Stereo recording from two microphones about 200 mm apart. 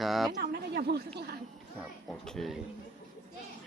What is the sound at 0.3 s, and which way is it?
A woman's voice, 55° right (ahead or behind).